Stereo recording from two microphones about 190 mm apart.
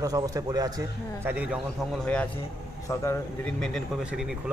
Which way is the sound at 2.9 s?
15° left (ahead or behind).